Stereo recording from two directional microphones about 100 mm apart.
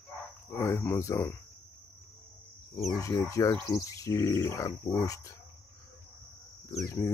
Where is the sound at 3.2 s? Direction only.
35° left (ahead or behind).